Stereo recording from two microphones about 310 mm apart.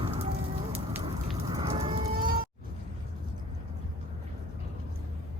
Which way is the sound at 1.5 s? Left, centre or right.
Centre.